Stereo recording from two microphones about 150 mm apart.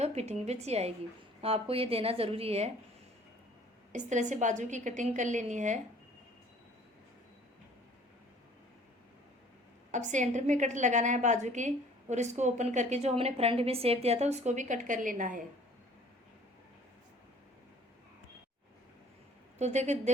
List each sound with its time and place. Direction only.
0.0 s a woman's voice: 45° right (ahead or behind)
3.9 s a woman's voice: 55° right (ahead or behind)
9.9 s a woman's voice: 55° right (ahead or behind)
19.5 s a woman's voice: 50° right (ahead or behind)